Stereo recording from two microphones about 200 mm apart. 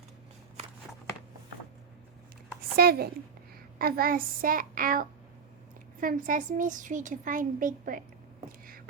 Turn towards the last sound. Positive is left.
turn(degrees=-45)  # may be behind; listen again after turning